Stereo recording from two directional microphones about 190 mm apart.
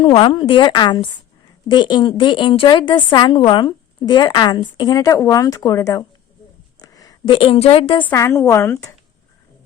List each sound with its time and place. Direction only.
0.0 s a woman's voice: 30° left (ahead or behind)
8.0 s a woman's voice: 15° left (ahead or behind)